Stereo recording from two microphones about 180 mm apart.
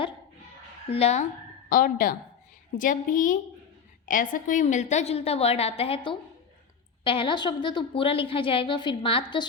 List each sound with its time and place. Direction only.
0.9 s a woman's voice: 35° left (ahead or behind)
1.7 s a woman's voice: 50° left (ahead or behind); by 9.5 s 25° left (ahead or behind)